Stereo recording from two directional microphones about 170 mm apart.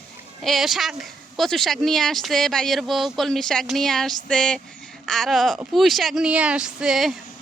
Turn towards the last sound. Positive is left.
turn(degrees=-5)  # may be behind; listen again after turning